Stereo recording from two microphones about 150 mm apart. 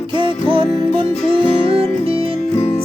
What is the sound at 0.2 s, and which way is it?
Music, 35° right (ahead or behind).